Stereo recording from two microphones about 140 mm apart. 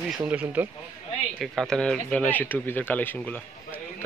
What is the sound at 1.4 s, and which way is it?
Speech, centre (ahead or behind).